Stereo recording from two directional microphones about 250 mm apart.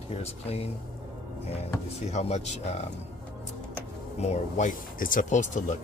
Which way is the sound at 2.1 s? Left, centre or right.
Left.